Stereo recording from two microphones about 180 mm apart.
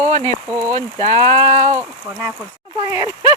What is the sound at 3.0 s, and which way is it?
Speech, 30° left (ahead or behind).